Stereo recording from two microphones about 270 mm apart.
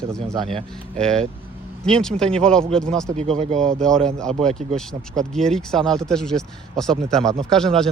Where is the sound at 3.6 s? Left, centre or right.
Centre.